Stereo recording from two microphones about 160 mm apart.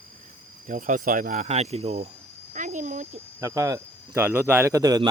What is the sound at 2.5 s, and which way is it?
Insect, 50° right (ahead or behind).